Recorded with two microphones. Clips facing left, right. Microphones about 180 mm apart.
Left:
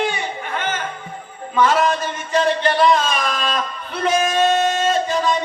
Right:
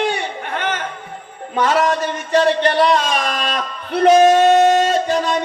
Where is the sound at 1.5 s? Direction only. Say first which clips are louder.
Even; 65° right (ahead or behind).